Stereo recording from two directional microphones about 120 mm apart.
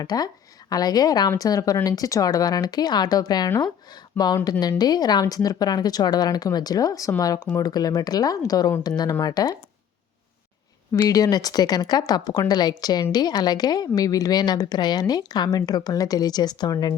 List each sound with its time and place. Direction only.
0.0 s a woman's voice: 35° left (ahead or behind)
4.1 s speech: 15° left (ahead or behind)
4.8 s a woman's voice: 35° left (ahead or behind)
10.9 s a woman's voice: 30° left (ahead or behind)